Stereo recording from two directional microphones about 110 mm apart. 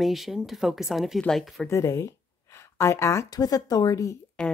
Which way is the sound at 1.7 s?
30° left (ahead or behind).